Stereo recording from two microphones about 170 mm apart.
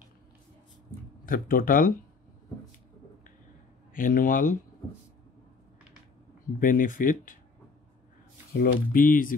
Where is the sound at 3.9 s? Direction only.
55° left (ahead or behind).